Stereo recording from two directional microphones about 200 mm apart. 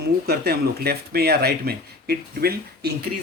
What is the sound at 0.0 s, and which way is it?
Speech, 50° right (ahead or behind).